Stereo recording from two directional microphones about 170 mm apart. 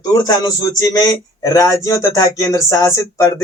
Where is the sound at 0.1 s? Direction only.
20° left (ahead or behind).